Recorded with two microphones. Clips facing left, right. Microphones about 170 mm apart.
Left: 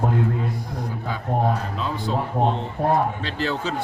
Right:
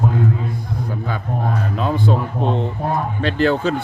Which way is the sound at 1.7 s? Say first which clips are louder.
Right 7 dB; 55° right (ahead or behind).